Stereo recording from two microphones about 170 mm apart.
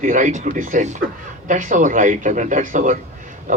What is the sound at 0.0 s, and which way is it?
A man's voice, 50° right (ahead or behind).